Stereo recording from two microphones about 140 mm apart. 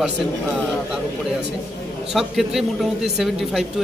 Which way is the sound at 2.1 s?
Centre (ahead or behind).